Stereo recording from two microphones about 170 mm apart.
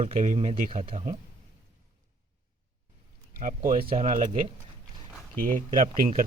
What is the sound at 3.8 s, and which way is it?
Speech, 30° right (ahead or behind).